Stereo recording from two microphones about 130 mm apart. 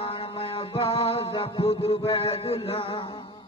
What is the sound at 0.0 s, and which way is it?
Music, 45° left (ahead or behind).